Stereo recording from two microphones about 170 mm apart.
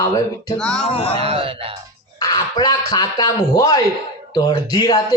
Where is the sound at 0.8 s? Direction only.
35° left (ahead or behind).